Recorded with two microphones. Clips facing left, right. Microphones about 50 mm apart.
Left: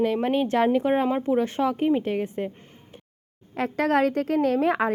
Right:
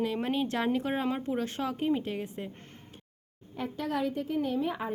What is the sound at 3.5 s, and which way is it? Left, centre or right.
A woman's voice, left.